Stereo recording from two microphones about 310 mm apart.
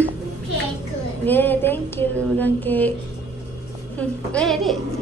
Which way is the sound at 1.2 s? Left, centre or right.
Centre.